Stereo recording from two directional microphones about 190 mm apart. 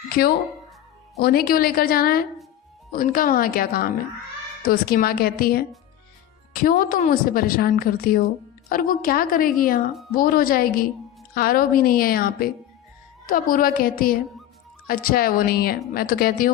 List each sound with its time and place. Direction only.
0.1 s speech: 55° left (ahead or behind)